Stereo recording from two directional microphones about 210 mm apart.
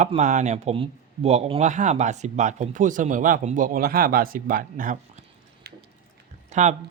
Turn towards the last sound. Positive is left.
turn(degrees=-35)  # may be behind; listen again after turning